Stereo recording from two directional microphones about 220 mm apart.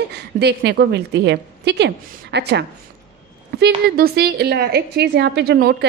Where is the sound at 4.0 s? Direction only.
45° right (ahead or behind).